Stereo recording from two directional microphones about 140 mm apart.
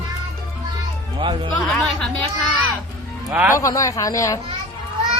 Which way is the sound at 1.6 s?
5° left (ahead or behind).